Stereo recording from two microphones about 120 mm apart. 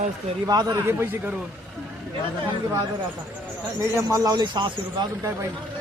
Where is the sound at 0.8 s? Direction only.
20° right (ahead or behind).